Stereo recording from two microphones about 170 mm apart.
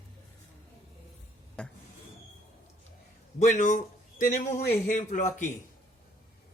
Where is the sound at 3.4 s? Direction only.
50° left (ahead or behind).